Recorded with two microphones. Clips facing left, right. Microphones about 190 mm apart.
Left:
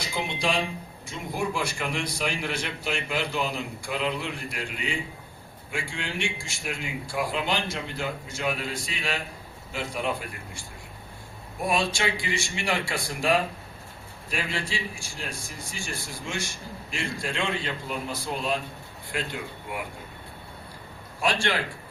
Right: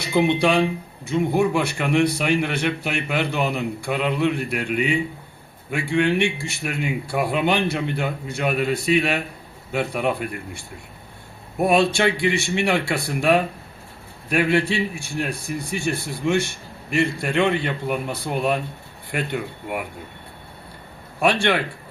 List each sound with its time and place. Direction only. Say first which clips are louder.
0.0 s speech: right 11 dB; 60° right (ahead or behind)
21.2 s speech: right 7 dB; 60° right (ahead or behind)